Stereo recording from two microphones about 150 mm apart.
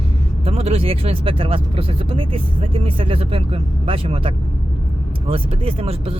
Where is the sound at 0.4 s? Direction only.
40° right (ahead or behind).